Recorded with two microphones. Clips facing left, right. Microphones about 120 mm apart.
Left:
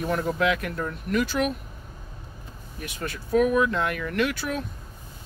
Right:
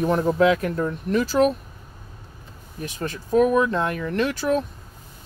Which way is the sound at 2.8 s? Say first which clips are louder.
Right 4 dB; 35° right (ahead or behind).